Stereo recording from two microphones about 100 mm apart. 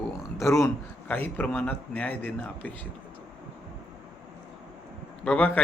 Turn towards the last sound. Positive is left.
turn(degrees=15)  # may be behind; listen again after turning